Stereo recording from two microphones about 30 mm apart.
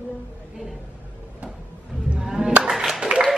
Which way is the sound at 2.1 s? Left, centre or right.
Centre.